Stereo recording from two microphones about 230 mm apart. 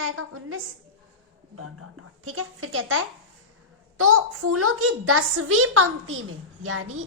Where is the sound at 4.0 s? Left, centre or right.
Right.